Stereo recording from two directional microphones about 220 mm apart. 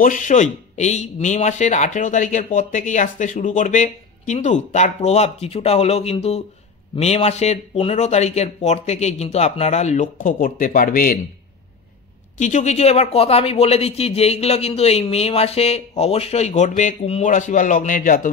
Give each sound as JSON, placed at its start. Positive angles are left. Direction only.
{"t": 0.0, "sound": "speech", "side_deg": 35}
{"t": 12.4, "sound": "speech", "side_deg": 35}